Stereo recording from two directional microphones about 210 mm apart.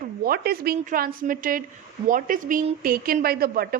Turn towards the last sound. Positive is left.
turn(degrees=-45)  # may be behind; listen again after turning